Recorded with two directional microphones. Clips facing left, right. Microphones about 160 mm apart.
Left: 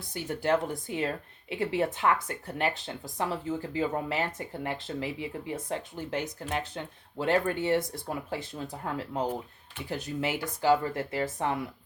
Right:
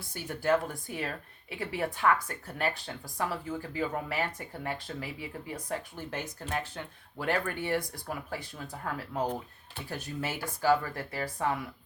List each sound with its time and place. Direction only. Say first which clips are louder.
0.1 s speech: left 1 dB; 20° left (ahead or behind)